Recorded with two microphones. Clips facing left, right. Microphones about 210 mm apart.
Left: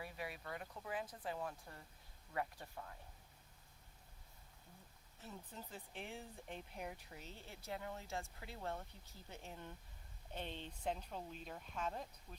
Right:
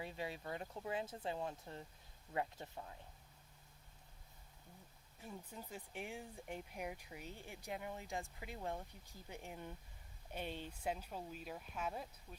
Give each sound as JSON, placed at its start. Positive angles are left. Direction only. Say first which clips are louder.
{"t": 0.0, "sound": "speech", "louder": "right 3 dB", "side_deg": -25}
{"t": 5.2, "sound": "speech", "louder": "right 2 dB", "side_deg": -10}